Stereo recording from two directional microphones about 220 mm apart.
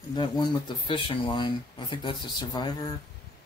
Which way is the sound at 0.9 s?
25° left (ahead or behind).